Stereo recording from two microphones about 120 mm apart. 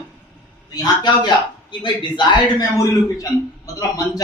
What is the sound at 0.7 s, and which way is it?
A man's voice, 35° left (ahead or behind).